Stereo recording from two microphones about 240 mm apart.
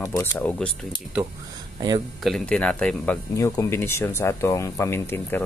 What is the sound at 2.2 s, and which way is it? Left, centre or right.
Speech, centre.